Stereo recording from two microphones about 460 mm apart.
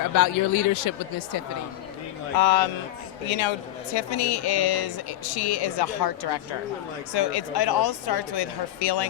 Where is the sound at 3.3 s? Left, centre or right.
Left.